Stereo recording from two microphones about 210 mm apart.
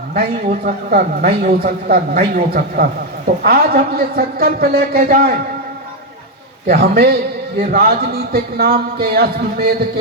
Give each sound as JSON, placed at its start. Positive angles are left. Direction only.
{"t": 0.1, "sound": "a man's voice", "side_deg": -45}
{"t": 6.7, "sound": "a man's voice", "side_deg": -45}